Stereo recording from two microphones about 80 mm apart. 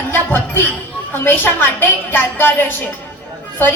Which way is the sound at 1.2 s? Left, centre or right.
Left.